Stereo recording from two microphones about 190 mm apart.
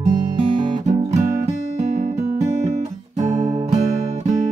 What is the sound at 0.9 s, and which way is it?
Music, 35° right (ahead or behind).